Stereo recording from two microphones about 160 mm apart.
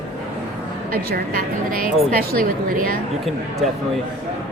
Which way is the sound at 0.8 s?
70° right (ahead or behind).